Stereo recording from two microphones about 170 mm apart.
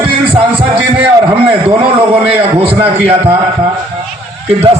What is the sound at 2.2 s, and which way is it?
Speech, 35° right (ahead or behind).